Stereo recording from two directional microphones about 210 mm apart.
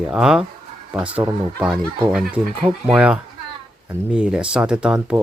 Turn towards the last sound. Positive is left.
turn(degrees=-5)  # may be behind; listen again after turning